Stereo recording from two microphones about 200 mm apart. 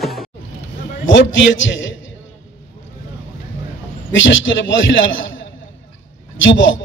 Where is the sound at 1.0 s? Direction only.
65° left (ahead or behind).